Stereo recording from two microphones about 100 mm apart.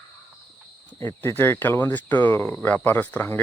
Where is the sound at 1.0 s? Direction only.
25° left (ahead or behind).